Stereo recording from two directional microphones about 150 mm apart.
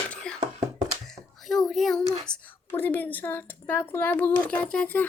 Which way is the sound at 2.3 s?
30° left (ahead or behind).